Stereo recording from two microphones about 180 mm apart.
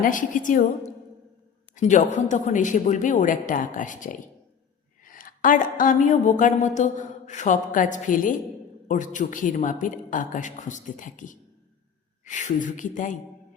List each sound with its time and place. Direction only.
0.0 s a woman's voice: 45° left (ahead or behind)
1.7 s a woman's voice: 40° left (ahead or behind)